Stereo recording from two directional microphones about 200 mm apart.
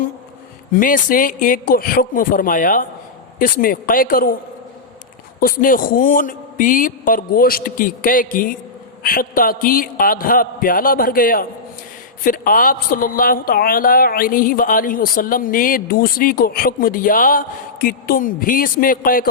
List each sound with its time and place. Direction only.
0.7 s a woman's voice: 45° left (ahead or behind)
5.4 s a woman's voice: 45° left (ahead or behind)